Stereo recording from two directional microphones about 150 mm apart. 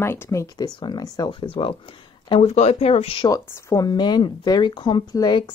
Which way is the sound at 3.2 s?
25° left (ahead or behind).